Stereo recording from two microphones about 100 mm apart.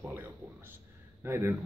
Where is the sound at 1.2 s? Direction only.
25° right (ahead or behind).